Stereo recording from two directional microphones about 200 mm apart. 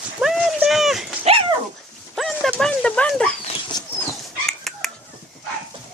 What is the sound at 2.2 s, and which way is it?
Dog, centre (ahead or behind).